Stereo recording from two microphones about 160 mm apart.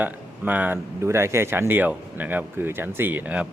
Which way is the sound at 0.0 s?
10° right (ahead or behind).